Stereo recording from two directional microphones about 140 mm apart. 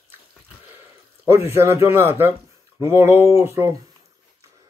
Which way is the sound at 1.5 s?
20° right (ahead or behind).